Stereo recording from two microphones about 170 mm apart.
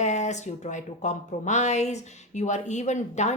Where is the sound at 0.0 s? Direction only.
45° left (ahead or behind).